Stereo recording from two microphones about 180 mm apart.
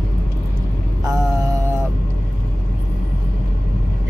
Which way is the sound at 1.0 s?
20° right (ahead or behind).